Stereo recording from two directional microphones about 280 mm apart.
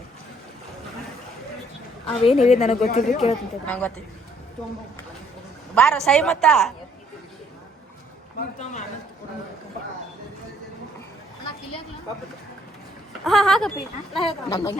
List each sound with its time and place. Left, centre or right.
2.2 s a woman's voice: left
3.7 s speech: centre
5.7 s speech: centre
13.2 s speech: centre